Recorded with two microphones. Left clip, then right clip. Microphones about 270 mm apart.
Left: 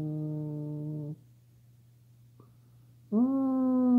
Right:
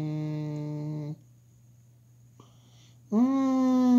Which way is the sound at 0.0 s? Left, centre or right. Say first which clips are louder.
Right 2 dB; right.